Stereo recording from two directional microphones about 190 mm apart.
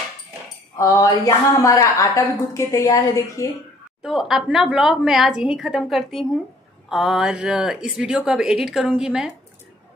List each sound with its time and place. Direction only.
0.7 s a woman's voice: 15° left (ahead or behind)
4.0 s speech: centre (ahead or behind)